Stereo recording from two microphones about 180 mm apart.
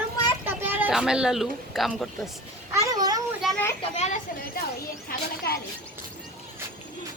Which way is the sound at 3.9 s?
40° left (ahead or behind).